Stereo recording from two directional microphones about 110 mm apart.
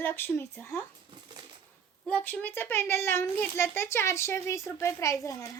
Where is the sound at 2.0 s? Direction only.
15° left (ahead or behind).